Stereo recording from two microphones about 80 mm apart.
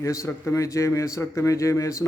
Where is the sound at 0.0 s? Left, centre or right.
Left.